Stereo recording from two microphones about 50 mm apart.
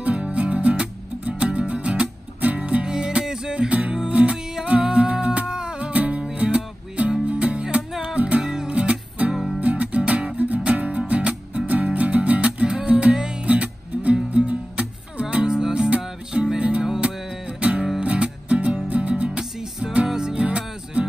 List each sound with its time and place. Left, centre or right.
0.0 s music: right
16.8 s music: centre
17.5 s music: right